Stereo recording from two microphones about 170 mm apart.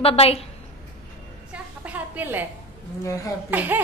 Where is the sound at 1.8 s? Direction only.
10° right (ahead or behind).